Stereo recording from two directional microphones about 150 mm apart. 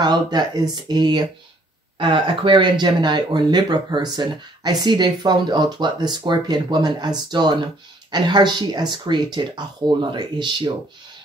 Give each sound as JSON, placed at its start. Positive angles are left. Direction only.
{"t": 0.0, "sound": "speech", "side_deg": -30}